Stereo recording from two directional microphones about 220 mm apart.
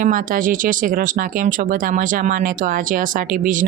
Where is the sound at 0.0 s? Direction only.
35° right (ahead or behind).